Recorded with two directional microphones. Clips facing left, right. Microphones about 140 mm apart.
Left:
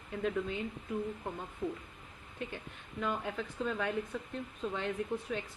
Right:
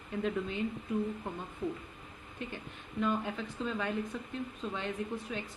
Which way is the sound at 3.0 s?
65° left (ahead or behind).